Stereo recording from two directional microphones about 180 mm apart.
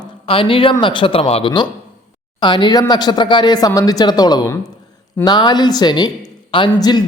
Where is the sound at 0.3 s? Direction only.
30° left (ahead or behind).